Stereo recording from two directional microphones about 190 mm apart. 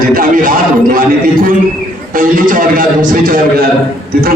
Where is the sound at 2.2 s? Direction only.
45° right (ahead or behind).